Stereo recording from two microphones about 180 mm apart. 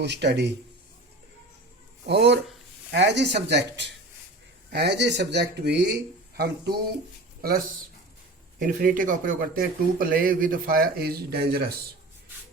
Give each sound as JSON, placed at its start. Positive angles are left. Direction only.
{"t": 0.0, "sound": "speech", "side_deg": -70}
{"t": 2.0, "sound": "speech", "side_deg": -70}
{"t": 8.5, "sound": "speech", "side_deg": -50}